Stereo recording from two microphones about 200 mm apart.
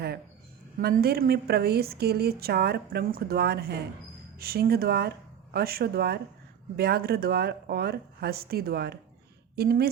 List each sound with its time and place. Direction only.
0.8 s a woman's voice: 50° right (ahead or behind)